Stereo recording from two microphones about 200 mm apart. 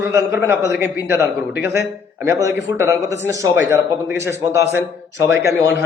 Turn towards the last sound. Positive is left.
turn(degrees=-10)  # may be behind; listen again after turning